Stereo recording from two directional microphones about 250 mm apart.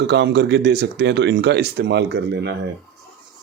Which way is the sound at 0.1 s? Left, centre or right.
Right.